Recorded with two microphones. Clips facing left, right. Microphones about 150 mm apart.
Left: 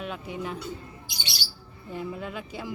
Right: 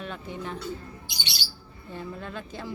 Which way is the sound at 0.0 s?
5° left (ahead or behind).